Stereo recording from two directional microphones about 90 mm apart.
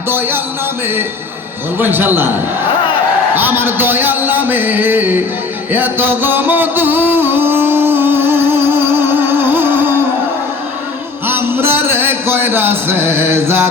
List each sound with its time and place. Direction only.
1.8 s speech: 20° right (ahead or behind)
3.3 s speech: 25° right (ahead or behind)
5.7 s music: 25° right (ahead or behind)
11.3 s a sound: 25° right (ahead or behind)